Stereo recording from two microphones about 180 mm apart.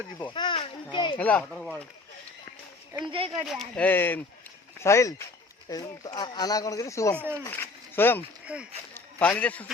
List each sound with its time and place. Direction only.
0.3 s a sound: 30° left (ahead or behind)
0.9 s speech: 25° left (ahead or behind)
1.2 s speech: 10° left (ahead or behind)
3.1 s speech: 30° right (ahead or behind)
3.5 s speech: 5° left (ahead or behind)
8.5 s speech: 5° right (ahead or behind)
9.0 s speech: 10° left (ahead or behind)